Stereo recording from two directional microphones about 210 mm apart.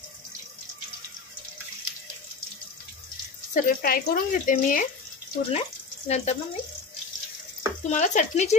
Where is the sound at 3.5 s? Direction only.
40° left (ahead or behind).